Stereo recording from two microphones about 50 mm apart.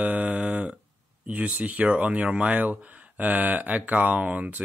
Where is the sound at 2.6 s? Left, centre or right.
Right.